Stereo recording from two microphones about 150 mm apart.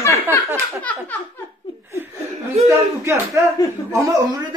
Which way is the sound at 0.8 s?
10° left (ahead or behind).